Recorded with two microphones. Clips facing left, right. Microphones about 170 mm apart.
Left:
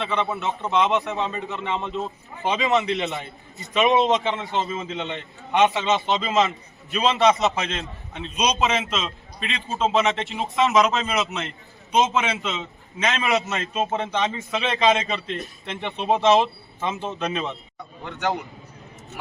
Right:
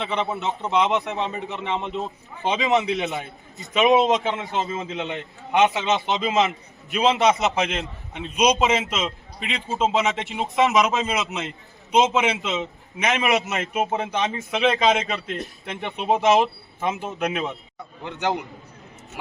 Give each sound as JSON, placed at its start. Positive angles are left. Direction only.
{"t": 0.0, "sound": "a man's voice", "side_deg": -20}
{"t": 2.9, "sound": "a man's voice", "side_deg": 0}
{"t": 3.8, "sound": "a man's voice", "side_deg": -15}
{"t": 13.9, "sound": "a man's voice", "side_deg": -5}
{"t": 18.0, "sound": "a man's voice", "side_deg": -20}